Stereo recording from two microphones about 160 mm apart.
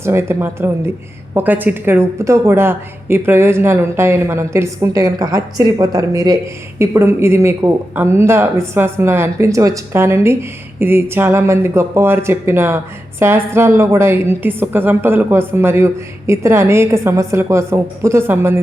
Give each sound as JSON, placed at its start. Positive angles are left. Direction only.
{"t": 0.0, "sound": "a woman's voice", "side_deg": -15}